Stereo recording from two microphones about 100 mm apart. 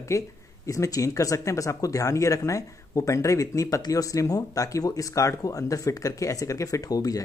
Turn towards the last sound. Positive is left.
turn(degrees=35)  # may be behind; listen again after turning